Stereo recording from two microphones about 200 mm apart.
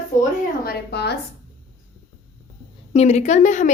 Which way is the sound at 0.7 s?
55° left (ahead or behind).